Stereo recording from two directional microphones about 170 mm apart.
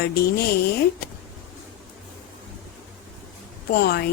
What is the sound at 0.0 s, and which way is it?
Speech, 65° left (ahead or behind).